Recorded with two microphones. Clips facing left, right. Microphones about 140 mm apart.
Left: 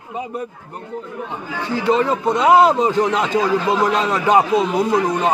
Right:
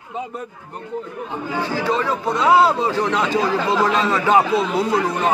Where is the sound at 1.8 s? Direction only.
25° left (ahead or behind).